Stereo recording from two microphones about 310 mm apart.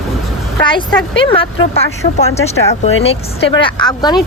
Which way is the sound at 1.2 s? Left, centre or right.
Centre.